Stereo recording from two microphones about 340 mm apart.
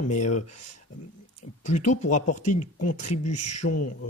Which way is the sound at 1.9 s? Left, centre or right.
Left.